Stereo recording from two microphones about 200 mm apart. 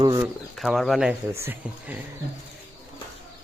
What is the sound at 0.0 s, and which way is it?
Speech, 20° right (ahead or behind).